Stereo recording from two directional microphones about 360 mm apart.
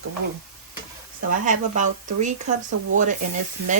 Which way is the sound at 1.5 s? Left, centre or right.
Centre.